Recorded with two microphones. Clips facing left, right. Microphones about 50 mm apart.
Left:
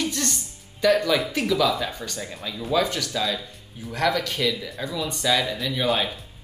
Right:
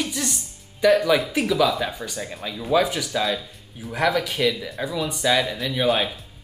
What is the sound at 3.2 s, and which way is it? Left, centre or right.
Speech, centre.